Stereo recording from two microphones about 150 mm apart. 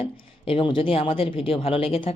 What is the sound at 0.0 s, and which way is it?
Speech, 35° left (ahead or behind).